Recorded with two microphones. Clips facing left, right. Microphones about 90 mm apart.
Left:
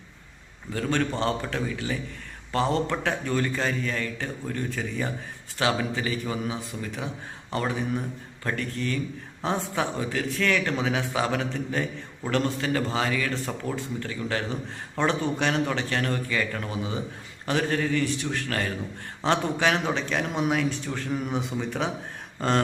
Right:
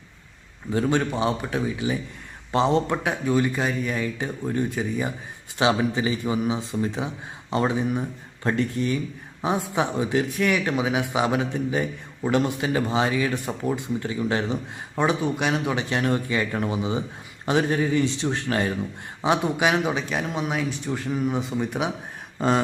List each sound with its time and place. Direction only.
0.7 s a man's voice: 20° right (ahead or behind); by 21.7 s centre (ahead or behind)
21.7 s speech: 10° right (ahead or behind)